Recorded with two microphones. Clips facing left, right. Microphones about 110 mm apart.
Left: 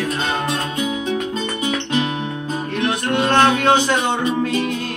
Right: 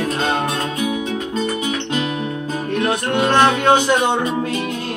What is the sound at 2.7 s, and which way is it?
Music, 10° right (ahead or behind).